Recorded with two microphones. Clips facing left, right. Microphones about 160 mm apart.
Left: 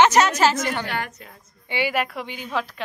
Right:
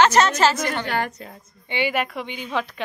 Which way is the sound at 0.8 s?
40° right (ahead or behind).